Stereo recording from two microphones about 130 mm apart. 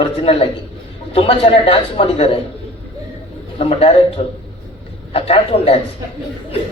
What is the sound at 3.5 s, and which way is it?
A man's voice, 50° left (ahead or behind).